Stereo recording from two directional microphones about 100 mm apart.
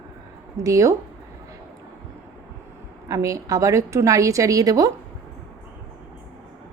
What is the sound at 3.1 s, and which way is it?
A woman's voice, 30° right (ahead or behind).